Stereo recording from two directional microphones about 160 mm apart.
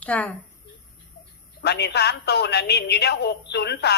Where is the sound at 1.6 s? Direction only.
90° left.